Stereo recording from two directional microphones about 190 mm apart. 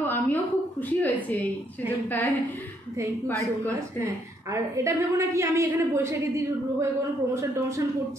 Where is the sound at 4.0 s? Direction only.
15° right (ahead or behind).